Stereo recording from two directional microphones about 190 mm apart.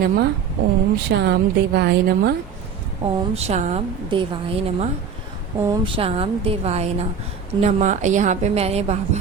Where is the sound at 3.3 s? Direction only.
35° right (ahead or behind).